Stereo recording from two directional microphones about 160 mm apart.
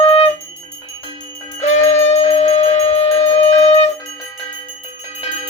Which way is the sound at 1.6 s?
50° left (ahead or behind).